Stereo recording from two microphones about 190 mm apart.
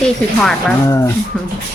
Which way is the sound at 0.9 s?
15° left (ahead or behind).